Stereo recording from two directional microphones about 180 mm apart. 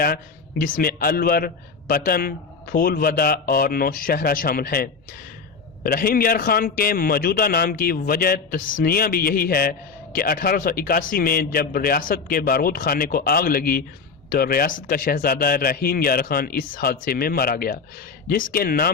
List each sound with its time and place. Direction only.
0.6 s a man's voice: 55° left (ahead or behind)